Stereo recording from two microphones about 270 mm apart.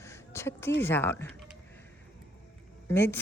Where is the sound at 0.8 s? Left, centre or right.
Centre.